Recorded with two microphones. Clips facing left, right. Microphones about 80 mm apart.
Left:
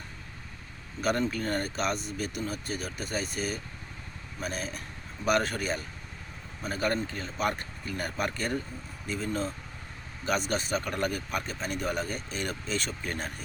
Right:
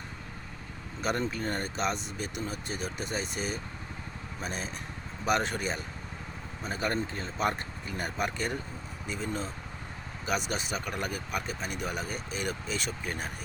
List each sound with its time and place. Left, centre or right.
1.0 s speech: right